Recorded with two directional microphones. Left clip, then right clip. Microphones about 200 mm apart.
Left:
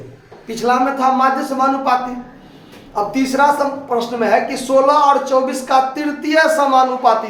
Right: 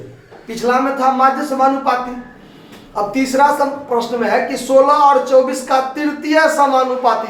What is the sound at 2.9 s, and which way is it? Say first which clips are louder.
Speech: right 1 dB; 15° left (ahead or behind).